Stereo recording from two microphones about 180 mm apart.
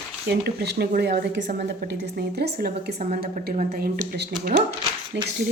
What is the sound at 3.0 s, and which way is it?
A woman's voice, 50° right (ahead or behind).